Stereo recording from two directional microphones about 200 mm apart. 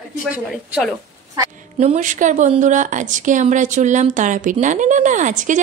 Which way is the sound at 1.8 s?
35° right (ahead or behind).